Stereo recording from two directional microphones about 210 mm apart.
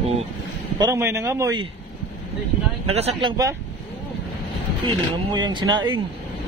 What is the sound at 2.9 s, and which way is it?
Speech, 30° right (ahead or behind).